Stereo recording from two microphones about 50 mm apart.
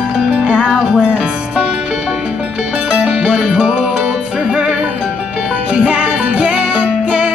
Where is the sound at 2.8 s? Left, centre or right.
Right.